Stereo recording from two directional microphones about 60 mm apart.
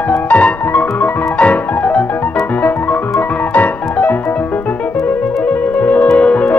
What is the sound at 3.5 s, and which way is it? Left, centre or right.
Music, left.